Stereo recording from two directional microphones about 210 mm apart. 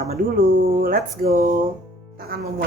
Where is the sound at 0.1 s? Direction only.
45° right (ahead or behind).